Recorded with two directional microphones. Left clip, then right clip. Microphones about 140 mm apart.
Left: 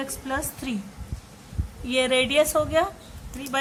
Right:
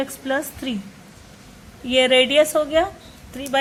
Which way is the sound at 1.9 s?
15° right (ahead or behind).